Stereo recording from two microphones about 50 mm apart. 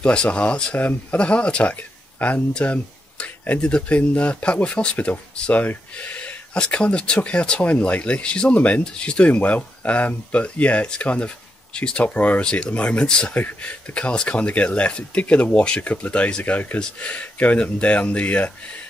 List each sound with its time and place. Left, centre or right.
0.0 s speech: left
5.5 s speech: left
6.5 s speech: left
13.3 s speech: left